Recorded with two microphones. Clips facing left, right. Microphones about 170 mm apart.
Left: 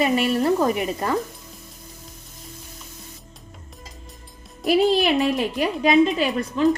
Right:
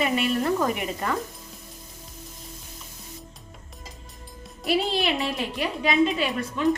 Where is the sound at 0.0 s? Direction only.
35° left (ahead or behind).